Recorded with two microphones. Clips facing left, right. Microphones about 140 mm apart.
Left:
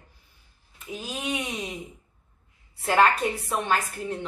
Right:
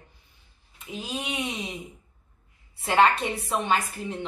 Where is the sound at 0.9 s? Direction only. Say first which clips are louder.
Left 1 dB; centre (ahead or behind).